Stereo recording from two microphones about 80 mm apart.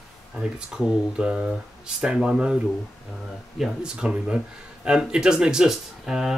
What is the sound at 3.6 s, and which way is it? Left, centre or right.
Speech, centre.